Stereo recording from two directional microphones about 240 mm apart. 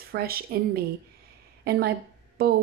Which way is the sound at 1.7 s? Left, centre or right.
Right.